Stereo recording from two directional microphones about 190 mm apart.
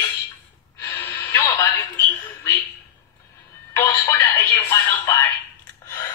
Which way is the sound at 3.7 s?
15° left (ahead or behind).